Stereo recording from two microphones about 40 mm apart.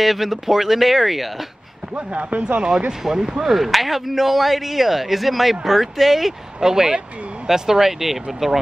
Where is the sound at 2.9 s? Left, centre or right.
Centre.